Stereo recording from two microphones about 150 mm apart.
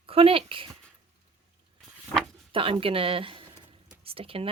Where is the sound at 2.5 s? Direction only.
35° right (ahead or behind).